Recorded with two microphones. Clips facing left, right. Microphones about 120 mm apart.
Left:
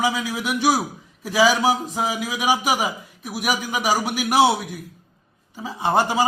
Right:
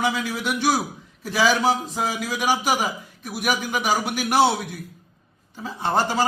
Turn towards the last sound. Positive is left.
turn(degrees=10)  # may be behind; listen again after turning